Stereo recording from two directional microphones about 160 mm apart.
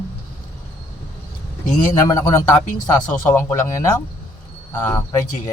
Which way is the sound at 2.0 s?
20° left (ahead or behind).